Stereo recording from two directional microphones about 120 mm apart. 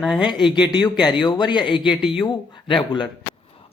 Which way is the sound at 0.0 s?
5° right (ahead or behind).